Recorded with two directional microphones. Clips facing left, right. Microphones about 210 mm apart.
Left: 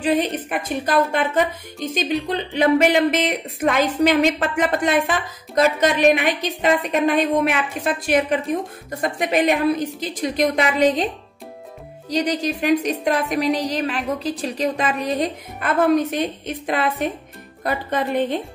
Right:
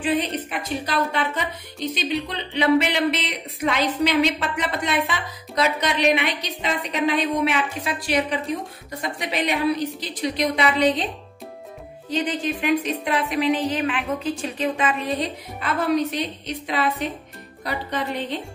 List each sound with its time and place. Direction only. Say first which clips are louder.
0.0 s a woman's voice: left 3 dB; 45° left (ahead or behind)
12.1 s a woman's voice: left 3 dB; 40° left (ahead or behind)
15.1 s a woman's voice: left 4 dB; 50° left (ahead or behind)